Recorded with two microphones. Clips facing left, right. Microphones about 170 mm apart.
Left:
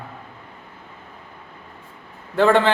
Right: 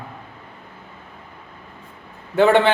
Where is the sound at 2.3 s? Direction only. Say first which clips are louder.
Right 2 dB; 5° right (ahead or behind).